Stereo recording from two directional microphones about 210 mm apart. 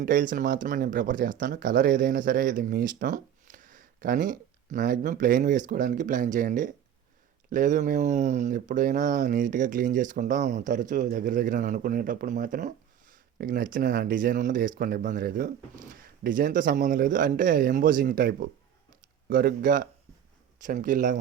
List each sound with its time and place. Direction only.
0.0 s speech: 40° right (ahead or behind)